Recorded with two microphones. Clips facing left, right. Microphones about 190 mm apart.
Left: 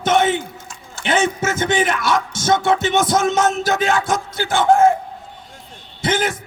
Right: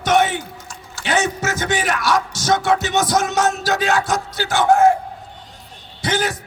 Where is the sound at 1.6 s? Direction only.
25° left (ahead or behind).